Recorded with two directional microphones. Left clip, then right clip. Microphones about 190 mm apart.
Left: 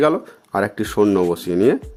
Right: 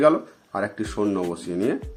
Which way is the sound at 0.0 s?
50° left (ahead or behind).